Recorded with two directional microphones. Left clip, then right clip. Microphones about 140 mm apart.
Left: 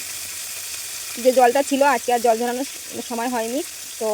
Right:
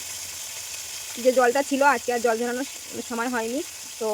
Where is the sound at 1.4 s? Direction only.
20° left (ahead or behind).